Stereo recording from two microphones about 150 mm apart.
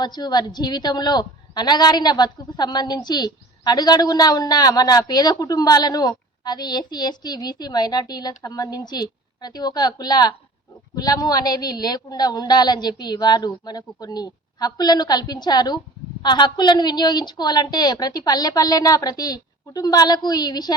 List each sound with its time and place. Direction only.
0.0 s a woman's voice: 30° left (ahead or behind)